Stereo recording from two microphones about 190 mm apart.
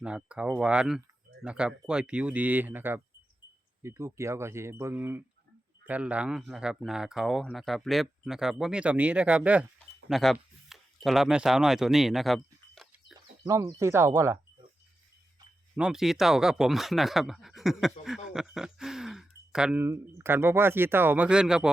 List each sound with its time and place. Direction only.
0.0 s speech: 5° right (ahead or behind)
10.1 s a sound: centre (ahead or behind)
13.4 s speech: 15° right (ahead or behind)
15.7 s speech: 5° right (ahead or behind)